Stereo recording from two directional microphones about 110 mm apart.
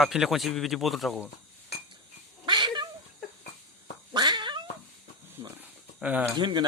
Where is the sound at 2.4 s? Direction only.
45° right (ahead or behind).